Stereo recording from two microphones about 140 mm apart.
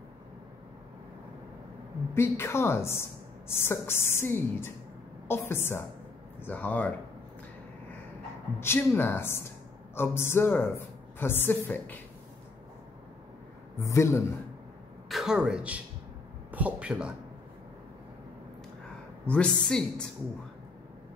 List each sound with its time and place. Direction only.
2.1 s speech: 15° left (ahead or behind)
8.5 s speech: 15° left (ahead or behind)
13.7 s a man's voice: 20° left (ahead or behind)
15.0 s speech: 5° right (ahead or behind)
19.2 s speech: 10° left (ahead or behind)